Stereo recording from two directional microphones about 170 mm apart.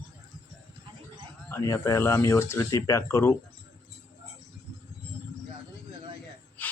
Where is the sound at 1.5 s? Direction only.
15° left (ahead or behind).